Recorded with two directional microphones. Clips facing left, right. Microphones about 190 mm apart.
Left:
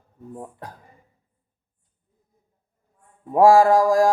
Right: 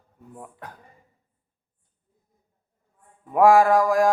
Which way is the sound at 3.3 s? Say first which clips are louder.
Left 2 dB; 30° left (ahead or behind).